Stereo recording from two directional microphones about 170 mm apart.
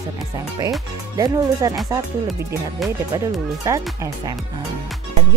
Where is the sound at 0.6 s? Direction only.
20° right (ahead or behind).